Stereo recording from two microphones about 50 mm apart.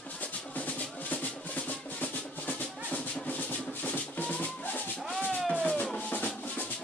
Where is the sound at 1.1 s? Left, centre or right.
Left.